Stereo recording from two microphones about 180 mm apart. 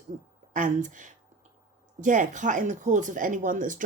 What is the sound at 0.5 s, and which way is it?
Speech, 45° right (ahead or behind).